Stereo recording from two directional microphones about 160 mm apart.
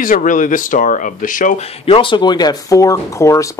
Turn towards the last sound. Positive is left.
turn(degrees=20)  # may be behind; listen again after turning